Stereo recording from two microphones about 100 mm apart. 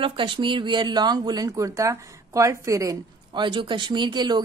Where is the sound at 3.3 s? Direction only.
50° right (ahead or behind).